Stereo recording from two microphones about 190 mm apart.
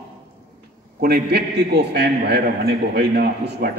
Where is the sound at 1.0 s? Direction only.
55° right (ahead or behind).